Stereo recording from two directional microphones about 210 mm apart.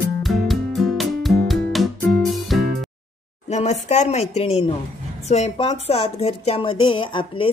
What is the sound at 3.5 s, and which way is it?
A woman's voice, 30° left (ahead or behind).